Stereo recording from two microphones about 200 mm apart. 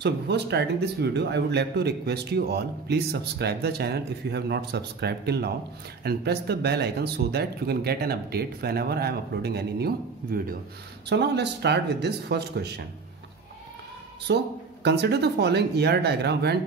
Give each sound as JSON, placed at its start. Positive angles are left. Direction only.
{"t": 0.0, "sound": "speech", "side_deg": -55}
{"t": 14.2, "sound": "speech", "side_deg": -55}